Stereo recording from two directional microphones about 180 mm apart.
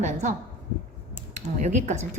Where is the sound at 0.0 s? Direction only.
40° right (ahead or behind).